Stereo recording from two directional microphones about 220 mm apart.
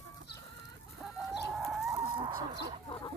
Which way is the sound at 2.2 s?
20° right (ahead or behind).